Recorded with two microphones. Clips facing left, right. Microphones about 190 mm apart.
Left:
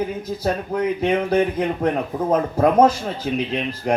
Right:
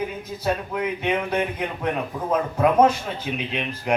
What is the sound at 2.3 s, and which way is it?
Speech, 35° left (ahead or behind).